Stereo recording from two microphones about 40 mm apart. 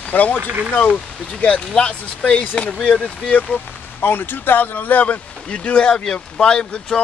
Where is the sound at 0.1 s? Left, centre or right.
Left.